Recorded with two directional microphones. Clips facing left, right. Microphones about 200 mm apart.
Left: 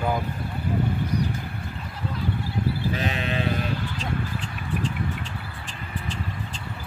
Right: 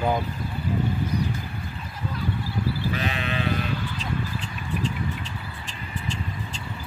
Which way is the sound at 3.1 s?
40° left (ahead or behind).